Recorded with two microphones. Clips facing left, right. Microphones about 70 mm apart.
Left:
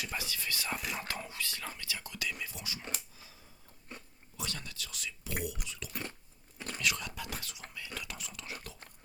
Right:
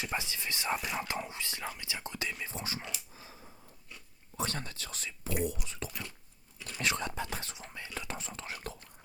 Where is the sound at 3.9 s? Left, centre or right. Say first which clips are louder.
Left 5 dB; left.